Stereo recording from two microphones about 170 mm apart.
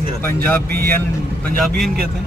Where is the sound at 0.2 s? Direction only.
15° left (ahead or behind).